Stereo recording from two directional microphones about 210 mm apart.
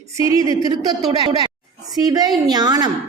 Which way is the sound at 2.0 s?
20° right (ahead or behind).